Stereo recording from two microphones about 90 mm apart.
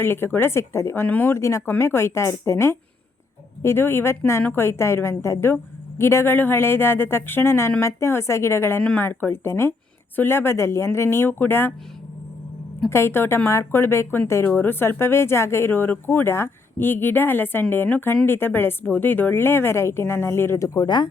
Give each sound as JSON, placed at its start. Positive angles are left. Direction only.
{"t": 0.0, "sound": "speech", "side_deg": 25}
{"t": 12.9, "sound": "speech", "side_deg": 30}
{"t": 20.8, "sound": "speech", "side_deg": 55}